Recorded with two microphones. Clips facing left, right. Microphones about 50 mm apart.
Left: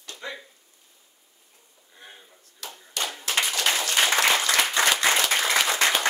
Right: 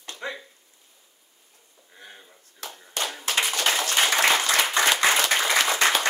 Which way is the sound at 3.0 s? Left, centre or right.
Right.